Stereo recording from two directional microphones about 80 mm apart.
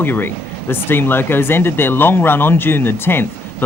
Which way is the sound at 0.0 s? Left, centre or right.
Left.